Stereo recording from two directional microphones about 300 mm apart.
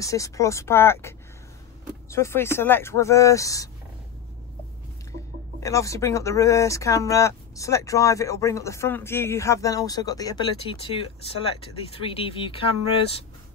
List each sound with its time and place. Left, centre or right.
0.0 s speech: centre
2.1 s speech: centre
5.6 s speech: centre